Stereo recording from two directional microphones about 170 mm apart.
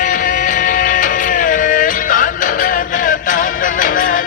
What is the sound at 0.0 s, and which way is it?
Music, 50° left (ahead or behind).